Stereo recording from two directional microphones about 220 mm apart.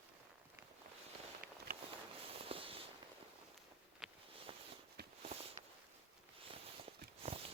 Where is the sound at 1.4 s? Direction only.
40° right (ahead or behind).